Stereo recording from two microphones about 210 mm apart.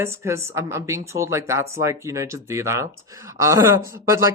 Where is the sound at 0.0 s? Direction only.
15° right (ahead or behind).